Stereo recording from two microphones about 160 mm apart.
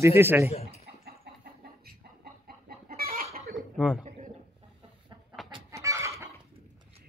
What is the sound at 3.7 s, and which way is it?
Speech, 5° right (ahead or behind).